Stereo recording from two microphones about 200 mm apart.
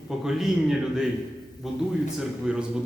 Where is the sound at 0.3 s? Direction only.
Centre (ahead or behind).